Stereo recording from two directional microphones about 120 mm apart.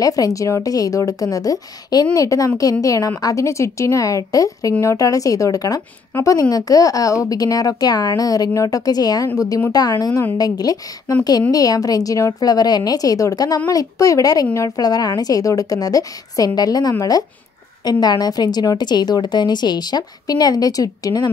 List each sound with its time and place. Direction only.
0.0 s a woman's voice: 30° left (ahead or behind)